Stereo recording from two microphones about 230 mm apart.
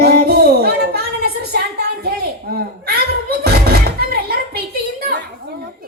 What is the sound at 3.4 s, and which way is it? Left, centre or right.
Music, right.